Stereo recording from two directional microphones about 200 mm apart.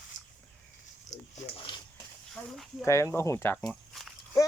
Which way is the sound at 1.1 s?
35° left (ahead or behind).